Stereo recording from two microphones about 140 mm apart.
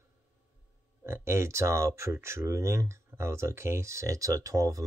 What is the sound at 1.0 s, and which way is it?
Speech, 20° right (ahead or behind).